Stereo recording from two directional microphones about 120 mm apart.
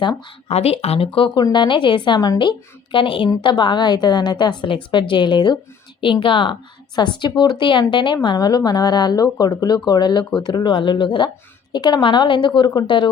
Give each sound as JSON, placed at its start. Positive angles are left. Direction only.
{"t": 0.4, "sound": "speech", "side_deg": 55}
{"t": 1.4, "sound": "a woman's voice", "side_deg": 35}